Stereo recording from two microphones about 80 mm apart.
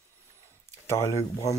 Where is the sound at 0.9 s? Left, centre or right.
Left.